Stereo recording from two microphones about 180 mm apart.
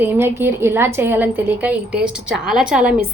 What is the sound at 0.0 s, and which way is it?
A woman's voice, 10° right (ahead or behind).